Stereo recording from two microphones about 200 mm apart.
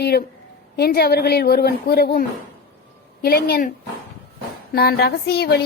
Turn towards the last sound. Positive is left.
turn(degrees=55)  # may be behind; listen again after turning